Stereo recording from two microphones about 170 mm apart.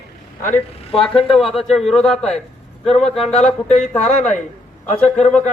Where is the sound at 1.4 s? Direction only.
Centre (ahead or behind).